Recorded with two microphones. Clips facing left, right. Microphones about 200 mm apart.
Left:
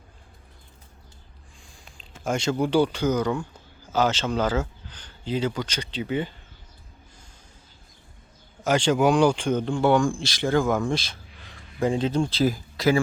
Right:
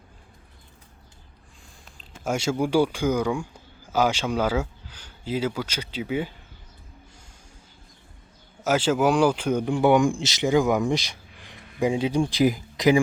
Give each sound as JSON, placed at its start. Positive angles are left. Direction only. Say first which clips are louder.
{"t": 2.2, "sound": "speech", "louder": "even", "side_deg": -10}
{"t": 8.6, "sound": "speech", "louder": "left 1 dB", "side_deg": -5}